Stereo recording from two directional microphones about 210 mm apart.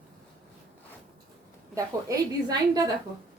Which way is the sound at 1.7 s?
15° right (ahead or behind).